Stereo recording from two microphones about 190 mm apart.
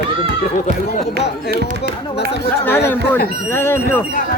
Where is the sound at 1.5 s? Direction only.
50° right (ahead or behind).